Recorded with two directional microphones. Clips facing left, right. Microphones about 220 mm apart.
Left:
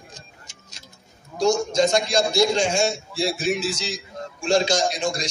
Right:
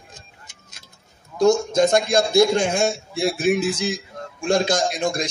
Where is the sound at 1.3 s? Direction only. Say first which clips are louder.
Right 3 dB; 55° right (ahead or behind).